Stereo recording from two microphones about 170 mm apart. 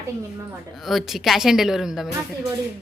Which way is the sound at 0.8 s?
Centre (ahead or behind).